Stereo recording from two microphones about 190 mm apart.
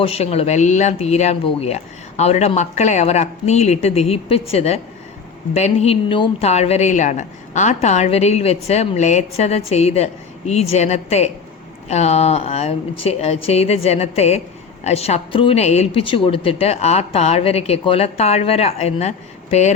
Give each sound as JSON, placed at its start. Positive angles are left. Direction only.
{"t": 0.0, "sound": "a woman's voice", "side_deg": 30}